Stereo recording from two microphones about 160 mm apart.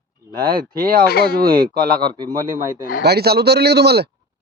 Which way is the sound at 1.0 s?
80° left.